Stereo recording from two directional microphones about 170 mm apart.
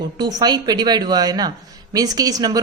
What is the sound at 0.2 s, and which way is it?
A woman's voice, 25° right (ahead or behind).